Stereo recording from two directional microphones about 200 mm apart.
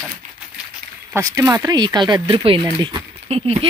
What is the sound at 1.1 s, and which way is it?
Speech, 15° right (ahead or behind).